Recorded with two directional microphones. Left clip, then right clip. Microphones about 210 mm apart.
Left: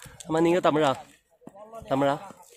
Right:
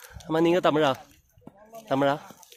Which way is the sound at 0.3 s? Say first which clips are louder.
Even; 5° right (ahead or behind).